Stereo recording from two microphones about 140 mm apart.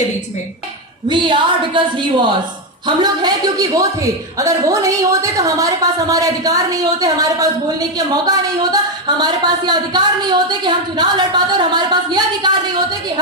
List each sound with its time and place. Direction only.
1.0 s a woman's voice: 35° right (ahead or behind)